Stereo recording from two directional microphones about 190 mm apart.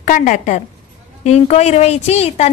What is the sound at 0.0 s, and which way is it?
A woman's voice, 45° left (ahead or behind).